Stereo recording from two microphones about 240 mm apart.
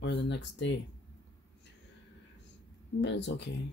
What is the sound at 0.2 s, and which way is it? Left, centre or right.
Speech, left.